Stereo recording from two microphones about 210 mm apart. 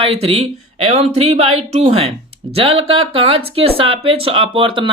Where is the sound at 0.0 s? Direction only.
30° right (ahead or behind).